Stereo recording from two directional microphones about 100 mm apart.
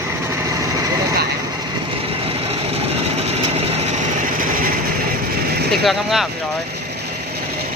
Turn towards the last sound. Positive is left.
turn(degrees=0)  # may be behind; listen again after turning